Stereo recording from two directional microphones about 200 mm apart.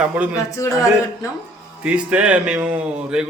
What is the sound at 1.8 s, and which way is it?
A man's voice, 5° right (ahead or behind).